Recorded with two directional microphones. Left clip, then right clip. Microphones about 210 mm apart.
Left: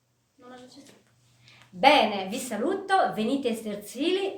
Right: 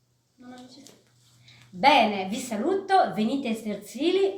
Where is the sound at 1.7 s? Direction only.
20° left (ahead or behind).